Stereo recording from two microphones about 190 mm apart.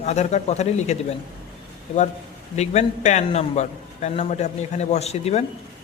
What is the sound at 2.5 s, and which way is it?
A man's voice, 35° left (ahead or behind).